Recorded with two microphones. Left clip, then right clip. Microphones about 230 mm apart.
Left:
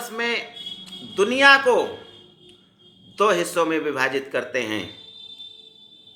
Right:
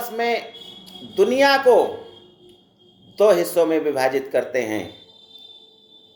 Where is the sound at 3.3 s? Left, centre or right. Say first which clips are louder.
Right 3 dB; left.